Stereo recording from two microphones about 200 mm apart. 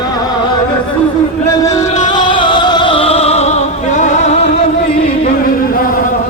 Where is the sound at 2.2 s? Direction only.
25° left (ahead or behind).